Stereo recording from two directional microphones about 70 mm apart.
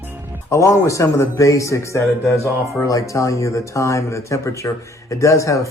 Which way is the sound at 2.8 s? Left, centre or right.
Left.